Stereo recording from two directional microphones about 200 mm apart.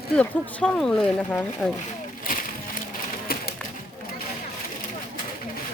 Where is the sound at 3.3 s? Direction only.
50° left (ahead or behind).